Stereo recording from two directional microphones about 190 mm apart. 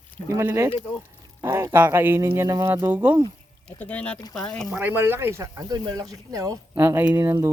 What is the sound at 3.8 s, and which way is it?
Speech, 5° left (ahead or behind).